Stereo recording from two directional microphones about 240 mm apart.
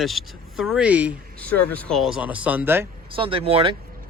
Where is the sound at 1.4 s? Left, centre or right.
Centre.